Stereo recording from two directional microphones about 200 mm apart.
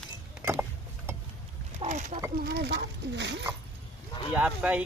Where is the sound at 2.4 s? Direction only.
55° right (ahead or behind).